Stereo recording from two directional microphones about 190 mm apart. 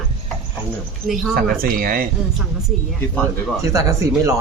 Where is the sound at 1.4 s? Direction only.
50° right (ahead or behind).